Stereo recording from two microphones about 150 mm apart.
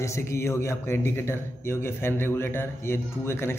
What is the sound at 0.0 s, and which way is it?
Speech, 20° left (ahead or behind).